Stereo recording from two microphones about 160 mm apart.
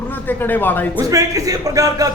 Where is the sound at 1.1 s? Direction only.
20° right (ahead or behind).